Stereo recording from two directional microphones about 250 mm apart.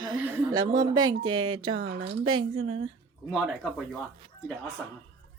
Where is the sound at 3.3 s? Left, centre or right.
Centre.